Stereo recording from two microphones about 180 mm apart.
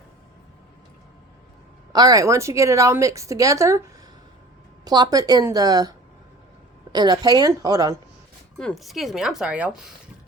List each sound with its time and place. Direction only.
1.9 s a woman's voice: 20° right (ahead or behind)
4.9 s speech: 20° right (ahead or behind)
6.9 s speech: 25° right (ahead or behind)
8.5 s speech: centre (ahead or behind)